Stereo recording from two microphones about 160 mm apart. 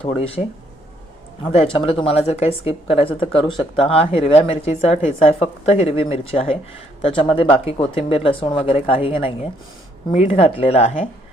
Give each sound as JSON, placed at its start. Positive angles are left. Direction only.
{"t": 0.0, "sound": "speech", "side_deg": 40}
{"t": 1.5, "sound": "speech", "side_deg": 30}